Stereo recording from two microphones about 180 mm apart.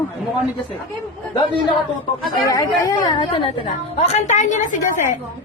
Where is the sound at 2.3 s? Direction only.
20° left (ahead or behind); by 4.8 s 45° left (ahead or behind).